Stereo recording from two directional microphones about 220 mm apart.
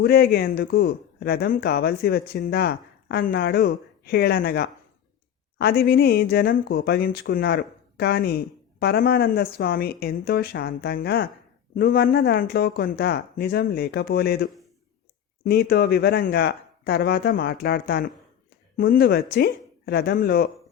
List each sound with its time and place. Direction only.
0.0 s speech: 45° left (ahead or behind)